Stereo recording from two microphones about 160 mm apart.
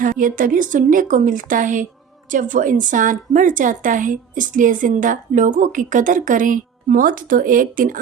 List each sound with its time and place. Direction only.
0.0 s a woman's voice: 60° right (ahead or behind)